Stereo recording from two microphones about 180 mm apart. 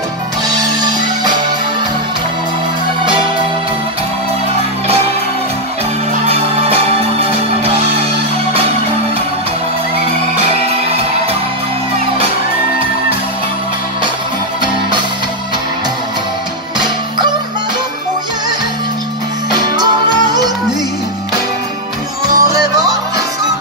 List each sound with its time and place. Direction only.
0.7 s music: 20° right (ahead or behind)
6.2 s music: 35° right (ahead or behind)
22.3 s music: 20° right (ahead or behind)